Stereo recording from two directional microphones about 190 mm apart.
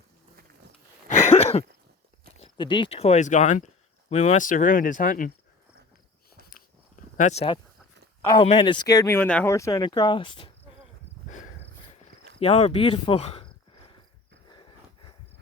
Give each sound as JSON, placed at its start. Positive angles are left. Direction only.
{"t": 1.0, "sound": "a sound", "side_deg": 35}
{"t": 2.4, "sound": "speech", "side_deg": 25}
{"t": 6.5, "sound": "walk", "side_deg": 40}
{"t": 8.3, "sound": "speech", "side_deg": 25}
{"t": 12.4, "sound": "speech", "side_deg": 35}